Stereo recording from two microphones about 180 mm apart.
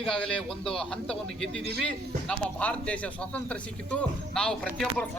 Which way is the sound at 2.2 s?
5° left (ahead or behind).